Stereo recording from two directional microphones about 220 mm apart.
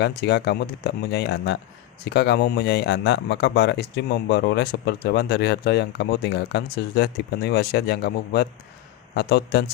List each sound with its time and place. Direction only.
0.0 s speech: 50° left (ahead or behind)